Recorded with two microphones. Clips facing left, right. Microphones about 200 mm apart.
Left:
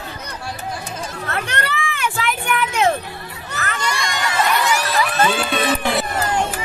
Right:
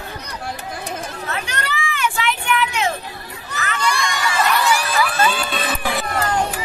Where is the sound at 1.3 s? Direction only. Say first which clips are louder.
Left 3 dB; 55° left (ahead or behind).